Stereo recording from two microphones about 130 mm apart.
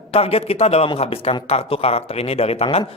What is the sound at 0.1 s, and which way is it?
Speech, 50° left (ahead or behind).